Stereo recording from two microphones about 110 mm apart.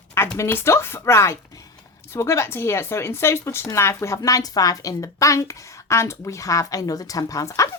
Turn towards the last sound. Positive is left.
turn(degrees=30)  # may be behind; listen again after turning